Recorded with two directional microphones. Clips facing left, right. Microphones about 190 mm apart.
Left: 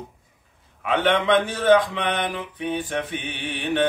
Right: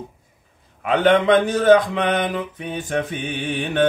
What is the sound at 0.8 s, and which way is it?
Speech, 40° right (ahead or behind).